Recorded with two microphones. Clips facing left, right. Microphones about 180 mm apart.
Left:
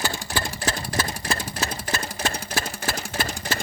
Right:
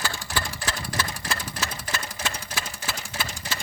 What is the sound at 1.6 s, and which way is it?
Sewing machine, 35° left (ahead or behind).